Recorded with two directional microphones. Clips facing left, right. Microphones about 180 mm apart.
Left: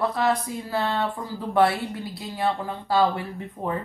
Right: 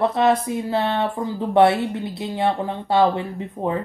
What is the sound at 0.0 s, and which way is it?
Speech, 25° right (ahead or behind).